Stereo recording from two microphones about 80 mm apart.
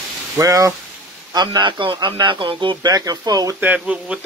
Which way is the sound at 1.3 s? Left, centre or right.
Right.